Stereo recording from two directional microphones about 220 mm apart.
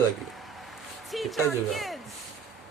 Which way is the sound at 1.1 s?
Centre (ahead or behind).